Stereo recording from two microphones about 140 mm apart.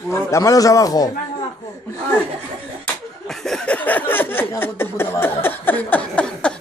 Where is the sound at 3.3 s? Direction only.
5° left (ahead or behind).